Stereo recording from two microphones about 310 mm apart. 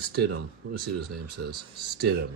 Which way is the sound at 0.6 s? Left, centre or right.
Right.